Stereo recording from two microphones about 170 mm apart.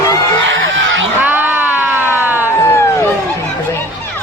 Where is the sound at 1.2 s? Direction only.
10° right (ahead or behind).